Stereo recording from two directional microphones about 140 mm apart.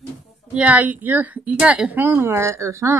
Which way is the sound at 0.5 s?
10° right (ahead or behind).